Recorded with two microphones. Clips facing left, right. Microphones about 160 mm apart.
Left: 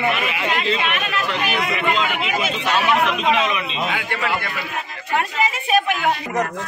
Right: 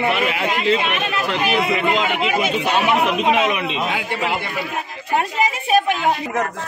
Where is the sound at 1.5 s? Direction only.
30° right (ahead or behind).